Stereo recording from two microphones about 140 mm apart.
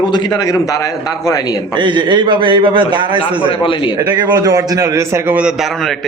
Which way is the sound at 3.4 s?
40° left (ahead or behind).